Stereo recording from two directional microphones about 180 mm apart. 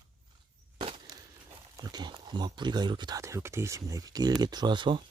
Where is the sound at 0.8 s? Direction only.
30° right (ahead or behind).